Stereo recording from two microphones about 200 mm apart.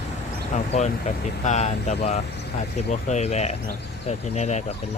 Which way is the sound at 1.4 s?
35° left (ahead or behind).